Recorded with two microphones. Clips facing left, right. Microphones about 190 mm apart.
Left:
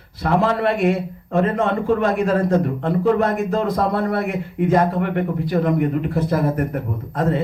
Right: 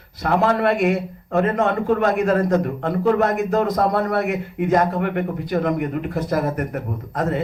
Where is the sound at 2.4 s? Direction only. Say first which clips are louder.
Left 1 dB; 30° left (ahead or behind).